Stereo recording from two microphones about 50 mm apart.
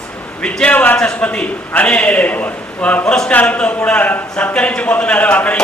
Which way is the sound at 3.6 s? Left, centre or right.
Left.